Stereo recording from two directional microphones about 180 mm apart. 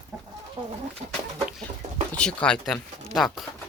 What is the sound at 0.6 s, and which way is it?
Speech, 30° right (ahead or behind).